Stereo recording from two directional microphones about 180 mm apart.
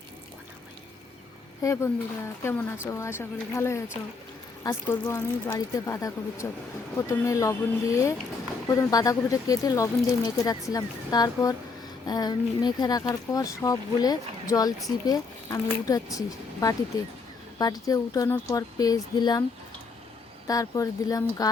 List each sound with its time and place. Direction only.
1.6 s speech: 15° left (ahead or behind)
20.5 s speech: 20° left (ahead or behind)